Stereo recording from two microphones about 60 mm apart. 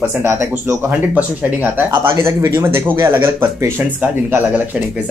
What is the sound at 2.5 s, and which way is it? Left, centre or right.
Speech, right.